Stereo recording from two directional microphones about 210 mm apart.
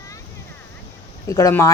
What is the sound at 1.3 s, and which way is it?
Speech, 15° left (ahead or behind).